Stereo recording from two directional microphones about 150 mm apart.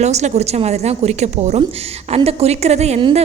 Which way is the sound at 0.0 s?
50° right (ahead or behind).